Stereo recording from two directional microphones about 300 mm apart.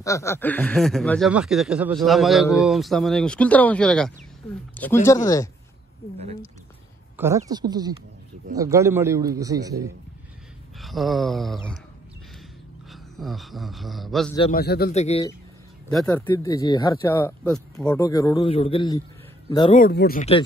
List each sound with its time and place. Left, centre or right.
0.0 s speech: centre
7.2 s a man's voice: centre
10.8 s speech: centre
12.9 s a man's voice: centre
14.5 s speech: left
15.9 s speech: centre
19.8 s speech: left